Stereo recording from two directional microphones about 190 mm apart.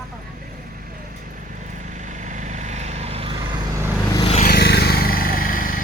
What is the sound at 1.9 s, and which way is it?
Vehicle, 40° right (ahead or behind).